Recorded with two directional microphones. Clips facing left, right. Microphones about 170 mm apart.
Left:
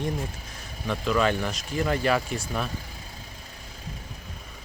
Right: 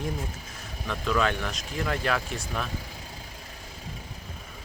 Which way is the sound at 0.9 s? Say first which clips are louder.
Left 3 dB; centre (ahead or behind).